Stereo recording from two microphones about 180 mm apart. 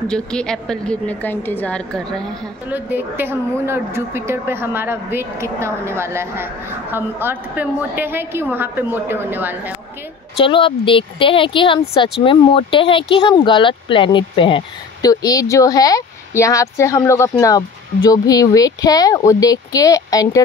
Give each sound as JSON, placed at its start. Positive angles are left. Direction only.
{"t": 0.1, "sound": "a woman's voice", "side_deg": 5}
{"t": 2.7, "sound": "a woman's voice", "side_deg": -10}
{"t": 10.3, "sound": "speech", "side_deg": 30}